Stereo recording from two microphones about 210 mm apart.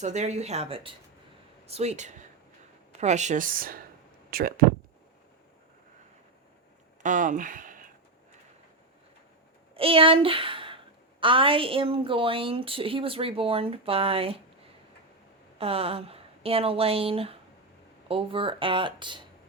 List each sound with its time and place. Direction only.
0.0 s speech: 35° right (ahead or behind)
7.0 s speech: 40° right (ahead or behind)
9.7 s a woman's voice: 25° right (ahead or behind)
15.5 s a woman's voice: 30° right (ahead or behind)